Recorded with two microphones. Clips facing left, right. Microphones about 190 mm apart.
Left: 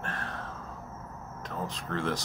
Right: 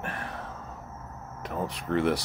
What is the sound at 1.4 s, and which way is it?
Speech, 10° right (ahead or behind).